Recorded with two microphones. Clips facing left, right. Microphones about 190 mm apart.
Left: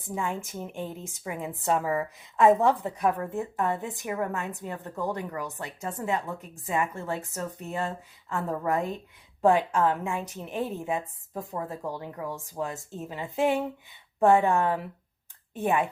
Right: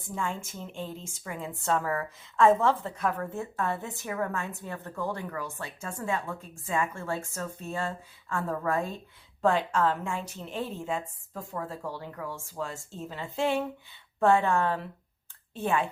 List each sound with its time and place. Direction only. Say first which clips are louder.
0.0 s a woman's voice: left 2 dB; 15° left (ahead or behind)